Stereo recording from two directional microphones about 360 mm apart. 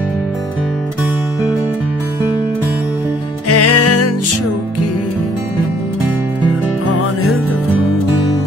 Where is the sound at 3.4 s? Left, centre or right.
Left.